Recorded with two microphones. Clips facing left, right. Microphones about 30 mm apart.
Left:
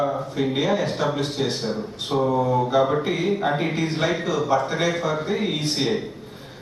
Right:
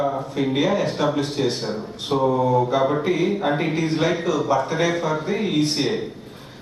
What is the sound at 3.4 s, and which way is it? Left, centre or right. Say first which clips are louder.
Speech: right 1 dB; centre.